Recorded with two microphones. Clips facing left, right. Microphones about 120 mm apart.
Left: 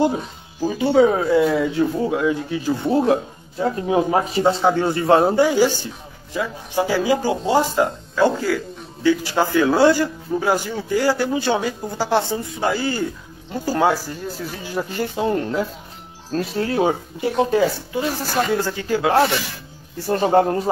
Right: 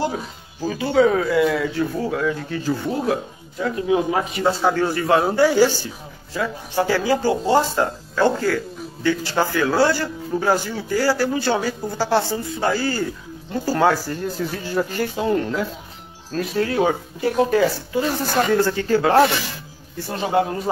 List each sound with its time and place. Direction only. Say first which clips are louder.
0.7 s a man's voice: left 1 dB; 20° left (ahead or behind)
20.1 s speech: left 5 dB; 40° left (ahead or behind)